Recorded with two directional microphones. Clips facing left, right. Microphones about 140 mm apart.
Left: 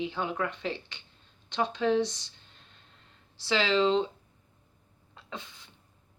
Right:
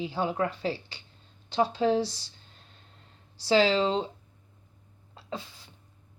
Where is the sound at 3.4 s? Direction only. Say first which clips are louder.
Right 3 dB; 40° right (ahead or behind).